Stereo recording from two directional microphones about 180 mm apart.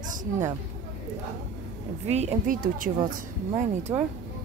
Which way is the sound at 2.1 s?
40° right (ahead or behind).